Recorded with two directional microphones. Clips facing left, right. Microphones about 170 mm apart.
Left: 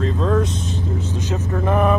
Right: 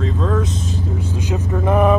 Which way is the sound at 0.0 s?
Centre (ahead or behind).